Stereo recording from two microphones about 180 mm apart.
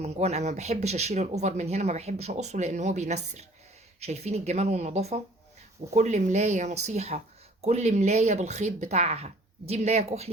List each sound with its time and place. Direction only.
0.0 s speech: 35° right (ahead or behind)